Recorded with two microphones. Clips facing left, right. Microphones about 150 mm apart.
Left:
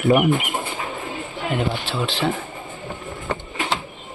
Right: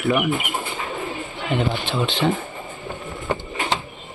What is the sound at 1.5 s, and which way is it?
Speech, 5° left (ahead or behind).